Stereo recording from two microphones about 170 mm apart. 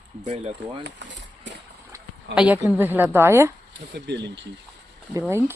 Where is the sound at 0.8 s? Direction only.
90° right.